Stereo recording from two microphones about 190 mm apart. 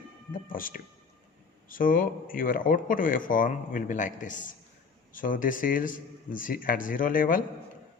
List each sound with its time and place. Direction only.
0.4 s speech: 45° left (ahead or behind)